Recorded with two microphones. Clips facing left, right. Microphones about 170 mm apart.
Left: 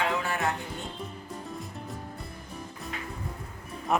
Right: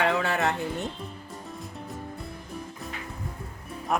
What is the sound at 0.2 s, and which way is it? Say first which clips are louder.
Music: right 4 dB; 70° right (ahead or behind).